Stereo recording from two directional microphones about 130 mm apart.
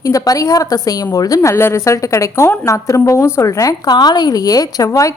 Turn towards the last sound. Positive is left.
turn(degrees=25)  # may be behind; listen again after turning